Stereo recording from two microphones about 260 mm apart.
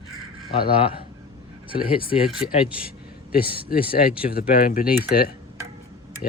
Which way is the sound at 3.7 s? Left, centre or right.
Left.